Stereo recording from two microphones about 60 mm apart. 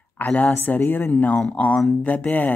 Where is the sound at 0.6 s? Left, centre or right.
Left.